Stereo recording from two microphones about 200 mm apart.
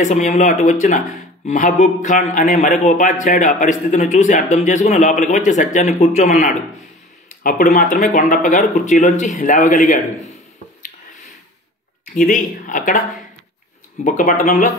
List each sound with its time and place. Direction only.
0.0 s a man's voice: 35° left (ahead or behind)
12.2 s a man's voice: 40° left (ahead or behind)
14.0 s a man's voice: 40° left (ahead or behind)